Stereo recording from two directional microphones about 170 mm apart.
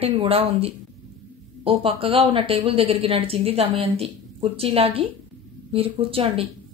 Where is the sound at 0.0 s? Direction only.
35° right (ahead or behind).